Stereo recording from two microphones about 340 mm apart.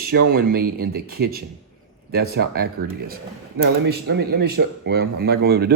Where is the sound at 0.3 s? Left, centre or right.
Right.